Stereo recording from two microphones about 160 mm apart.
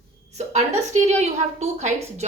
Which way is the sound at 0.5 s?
45° right (ahead or behind).